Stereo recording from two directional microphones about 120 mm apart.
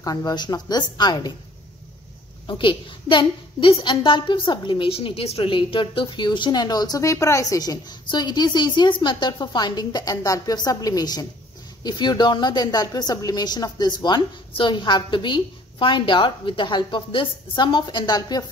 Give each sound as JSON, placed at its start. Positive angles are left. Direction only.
{"t": 0.0, "sound": "a woman's voice", "side_deg": 35}
{"t": 2.4, "sound": "a woman's voice", "side_deg": 45}